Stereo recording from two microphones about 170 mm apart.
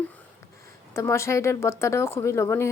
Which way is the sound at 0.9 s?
15° left (ahead or behind).